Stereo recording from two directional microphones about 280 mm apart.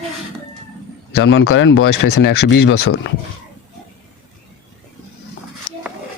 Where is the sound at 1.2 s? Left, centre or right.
Left.